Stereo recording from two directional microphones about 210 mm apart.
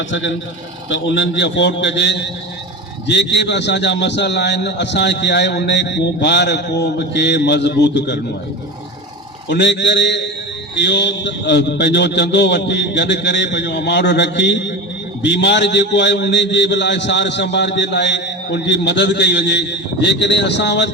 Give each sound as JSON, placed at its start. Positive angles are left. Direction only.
{"t": 0.1, "sound": "a man's voice", "side_deg": 65}
{"t": 9.5, "sound": "a man's voice", "side_deg": 55}